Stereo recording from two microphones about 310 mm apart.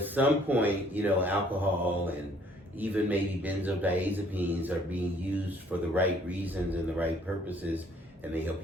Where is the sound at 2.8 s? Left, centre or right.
Centre.